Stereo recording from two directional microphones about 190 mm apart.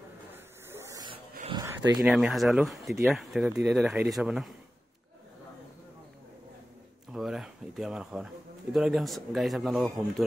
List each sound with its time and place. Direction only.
0.7 s a sound: 15° right (ahead or behind)
2.0 s speech: centre (ahead or behind)
7.1 s speech: centre (ahead or behind)